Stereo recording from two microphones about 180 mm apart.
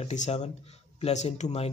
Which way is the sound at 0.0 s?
40° left (ahead or behind).